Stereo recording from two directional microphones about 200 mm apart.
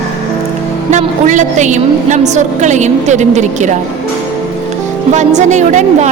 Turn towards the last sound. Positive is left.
turn(degrees=-35)  # may be behind; listen again after turning